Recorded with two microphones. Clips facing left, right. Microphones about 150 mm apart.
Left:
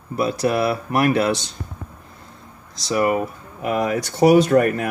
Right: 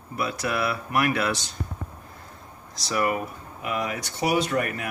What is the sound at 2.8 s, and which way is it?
Speech, 25° left (ahead or behind).